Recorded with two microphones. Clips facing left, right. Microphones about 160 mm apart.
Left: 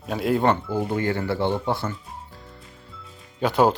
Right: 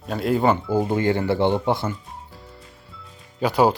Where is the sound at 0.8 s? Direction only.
25° right (ahead or behind).